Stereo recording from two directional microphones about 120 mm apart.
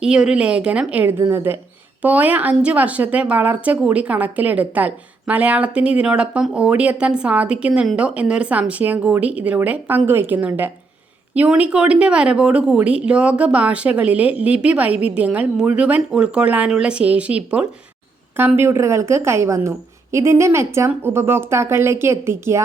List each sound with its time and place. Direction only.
0.0 s a woman's voice: 5° right (ahead or behind)